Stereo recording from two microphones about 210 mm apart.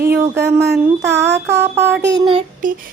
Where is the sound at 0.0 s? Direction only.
50° right (ahead or behind).